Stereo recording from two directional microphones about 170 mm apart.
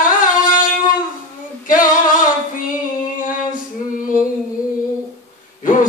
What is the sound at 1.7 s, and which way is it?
Female singing, 55° left (ahead or behind).